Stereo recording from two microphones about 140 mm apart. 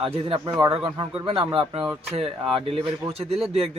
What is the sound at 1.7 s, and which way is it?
Speech, 10° right (ahead or behind).